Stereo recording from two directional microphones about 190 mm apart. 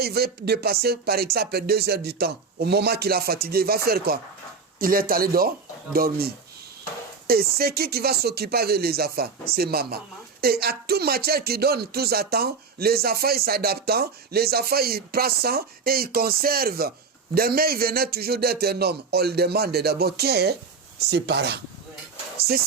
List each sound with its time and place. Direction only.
0.0 s speech: 55° right (ahead or behind)